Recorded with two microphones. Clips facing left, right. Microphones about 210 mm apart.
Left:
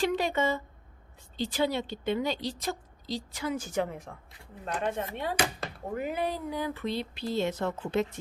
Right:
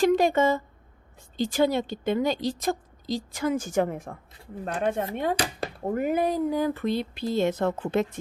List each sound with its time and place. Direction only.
0.0 s a woman's voice: 45° right (ahead or behind)